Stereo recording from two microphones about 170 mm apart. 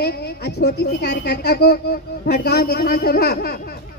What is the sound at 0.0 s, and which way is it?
A woman's voice, 75° left (ahead or behind).